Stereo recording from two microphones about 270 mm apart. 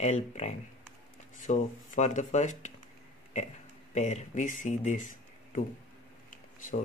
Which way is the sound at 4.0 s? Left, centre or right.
Left.